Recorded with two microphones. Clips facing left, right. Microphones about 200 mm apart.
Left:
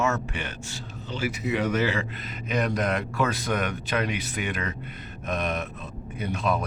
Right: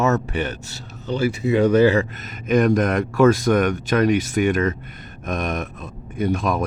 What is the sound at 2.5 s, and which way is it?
Speech, 50° right (ahead or behind).